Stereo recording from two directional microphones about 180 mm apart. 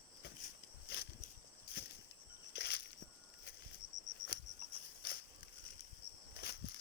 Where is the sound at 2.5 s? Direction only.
65° left (ahead or behind).